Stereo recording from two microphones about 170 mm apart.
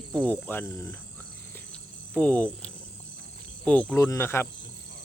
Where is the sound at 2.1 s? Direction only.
5° left (ahead or behind).